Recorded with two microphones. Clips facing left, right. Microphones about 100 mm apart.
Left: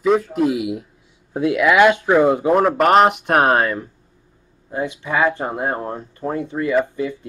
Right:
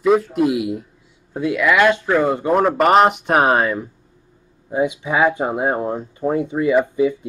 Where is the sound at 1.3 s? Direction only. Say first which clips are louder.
Left 2 dB; 15° left (ahead or behind).